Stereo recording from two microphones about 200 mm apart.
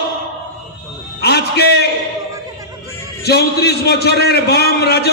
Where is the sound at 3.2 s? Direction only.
55° left (ahead or behind).